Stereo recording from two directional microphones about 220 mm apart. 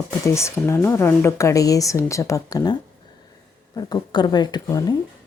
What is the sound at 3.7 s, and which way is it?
Speech, 20° left (ahead or behind).